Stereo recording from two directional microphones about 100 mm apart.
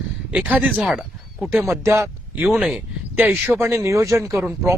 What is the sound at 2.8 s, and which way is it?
Speech, 15° right (ahead or behind).